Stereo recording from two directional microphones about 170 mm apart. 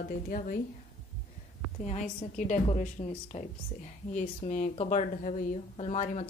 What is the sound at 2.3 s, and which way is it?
A woman's voice, 50° left (ahead or behind).